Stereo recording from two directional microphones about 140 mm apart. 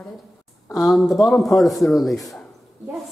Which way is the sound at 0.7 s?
Centre (ahead or behind).